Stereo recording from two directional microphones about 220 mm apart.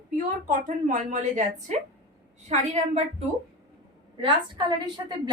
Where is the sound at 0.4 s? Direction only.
35° right (ahead or behind).